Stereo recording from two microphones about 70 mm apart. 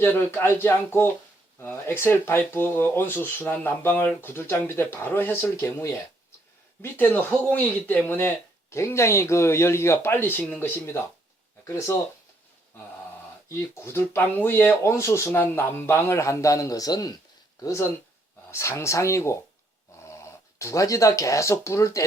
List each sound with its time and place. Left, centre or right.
0.0 s speech: left
5.5 s a man's voice: left
6.8 s speech: left
8.7 s a man's voice: left
13.5 s speech: left
14.8 s a man's voice: left
17.6 s a man's voice: left
20.6 s a man's voice: left